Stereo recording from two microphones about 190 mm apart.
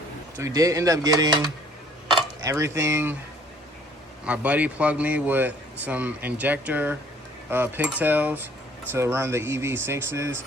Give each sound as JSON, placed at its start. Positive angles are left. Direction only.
{"t": 0.3, "sound": "speech", "side_deg": -15}
{"t": 4.3, "sound": "speech", "side_deg": -5}